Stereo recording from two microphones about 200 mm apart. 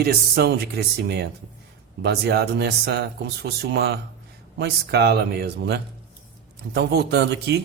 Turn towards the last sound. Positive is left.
turn(degrees=-55)  # may be behind; listen again after turning